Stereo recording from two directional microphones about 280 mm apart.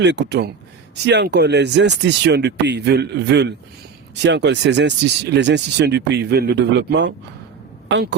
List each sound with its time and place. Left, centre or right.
0.0 s speech: right